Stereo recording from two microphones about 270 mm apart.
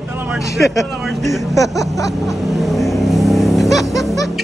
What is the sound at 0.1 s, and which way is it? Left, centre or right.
Vehicle, centre.